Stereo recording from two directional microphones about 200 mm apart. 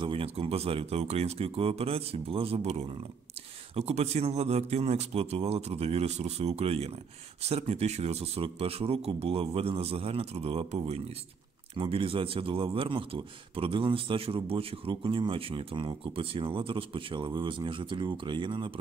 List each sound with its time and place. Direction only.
0.0 s speech: 25° right (ahead or behind)